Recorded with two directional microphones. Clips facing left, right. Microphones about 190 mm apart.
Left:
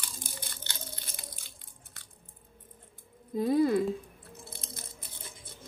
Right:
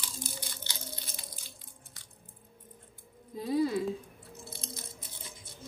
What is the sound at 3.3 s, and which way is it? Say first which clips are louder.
Speech: left 4 dB; 55° left (ahead or behind).